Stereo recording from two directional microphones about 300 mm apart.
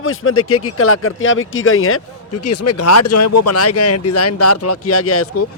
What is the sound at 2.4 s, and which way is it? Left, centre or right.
Speech, left.